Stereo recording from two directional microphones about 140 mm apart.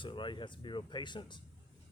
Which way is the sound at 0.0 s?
35° left (ahead or behind).